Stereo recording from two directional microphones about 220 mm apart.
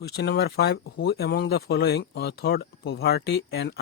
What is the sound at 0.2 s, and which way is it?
Speech, 50° left (ahead or behind).